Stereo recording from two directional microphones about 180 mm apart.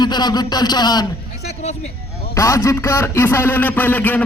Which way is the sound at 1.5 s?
40° left (ahead or behind).